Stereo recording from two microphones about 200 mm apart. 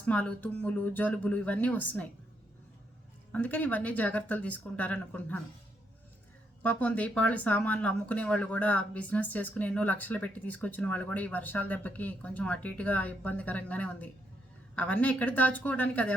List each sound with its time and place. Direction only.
0.0 s speech: 5° left (ahead or behind)
3.3 s speech: 10° left (ahead or behind)
6.6 s speech: 5° left (ahead or behind)